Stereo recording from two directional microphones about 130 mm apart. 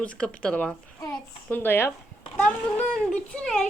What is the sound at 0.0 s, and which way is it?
Speech, 10° left (ahead or behind).